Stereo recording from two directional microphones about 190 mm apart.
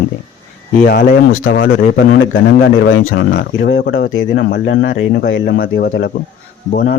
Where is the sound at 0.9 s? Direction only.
50° left (ahead or behind).